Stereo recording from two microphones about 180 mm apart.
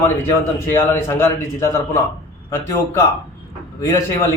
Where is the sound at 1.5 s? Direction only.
15° left (ahead or behind).